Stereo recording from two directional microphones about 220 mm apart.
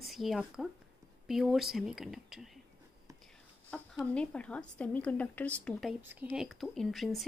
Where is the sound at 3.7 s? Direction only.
5° left (ahead or behind).